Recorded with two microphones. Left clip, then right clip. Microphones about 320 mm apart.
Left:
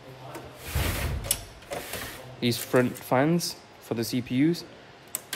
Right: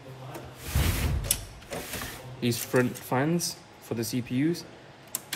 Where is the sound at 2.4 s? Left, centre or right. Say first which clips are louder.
Left 2 dB; left.